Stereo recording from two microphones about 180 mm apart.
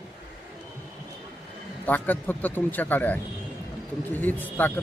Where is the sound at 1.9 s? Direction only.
10° left (ahead or behind).